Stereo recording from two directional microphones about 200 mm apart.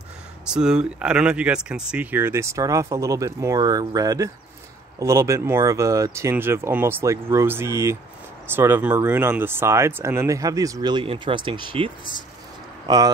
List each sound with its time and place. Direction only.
0.5 s speech: 5° right (ahead or behind); by 13.1 s 20° right (ahead or behind)